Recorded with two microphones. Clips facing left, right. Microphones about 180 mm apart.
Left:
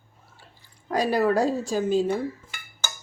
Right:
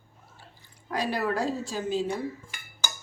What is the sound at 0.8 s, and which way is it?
A woman's voice, 40° left (ahead or behind).